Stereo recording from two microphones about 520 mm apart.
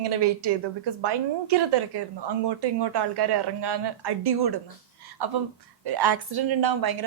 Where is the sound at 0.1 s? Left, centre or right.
Right.